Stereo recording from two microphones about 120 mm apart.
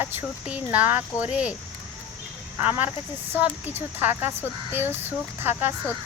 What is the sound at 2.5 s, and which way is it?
Speech, 15° right (ahead or behind).